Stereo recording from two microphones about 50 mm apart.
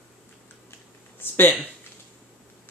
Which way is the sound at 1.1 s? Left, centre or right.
Left.